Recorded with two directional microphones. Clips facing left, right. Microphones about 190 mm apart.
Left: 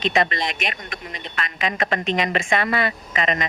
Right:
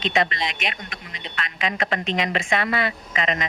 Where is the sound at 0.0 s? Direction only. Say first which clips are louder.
Left 2 dB; 50° left (ahead or behind).